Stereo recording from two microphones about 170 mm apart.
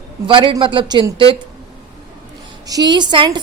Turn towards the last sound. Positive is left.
turn(degrees=-25)  # may be behind; listen again after turning